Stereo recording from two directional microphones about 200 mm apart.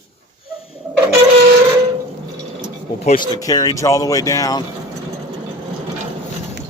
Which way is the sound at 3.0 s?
35° left (ahead or behind).